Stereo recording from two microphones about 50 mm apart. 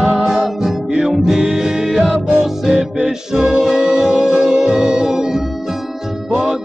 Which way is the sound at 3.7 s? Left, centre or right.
Right.